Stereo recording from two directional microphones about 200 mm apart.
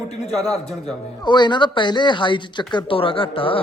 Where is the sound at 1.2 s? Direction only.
20° left (ahead or behind).